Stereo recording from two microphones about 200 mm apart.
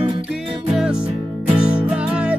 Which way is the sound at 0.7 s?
5° right (ahead or behind).